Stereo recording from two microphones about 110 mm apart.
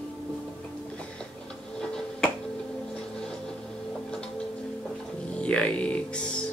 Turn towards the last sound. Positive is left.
turn(degrees=10)  # may be behind; listen again after turning